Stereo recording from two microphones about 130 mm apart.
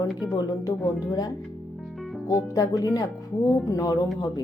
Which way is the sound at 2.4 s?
25° left (ahead or behind).